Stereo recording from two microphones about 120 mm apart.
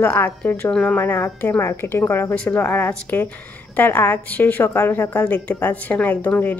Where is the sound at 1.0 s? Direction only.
20° left (ahead or behind).